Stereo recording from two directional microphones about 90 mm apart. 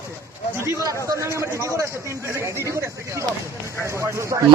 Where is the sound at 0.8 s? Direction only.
35° right (ahead or behind).